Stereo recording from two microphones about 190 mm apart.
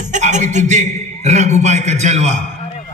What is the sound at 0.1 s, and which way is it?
A man's voice, 40° right (ahead or behind).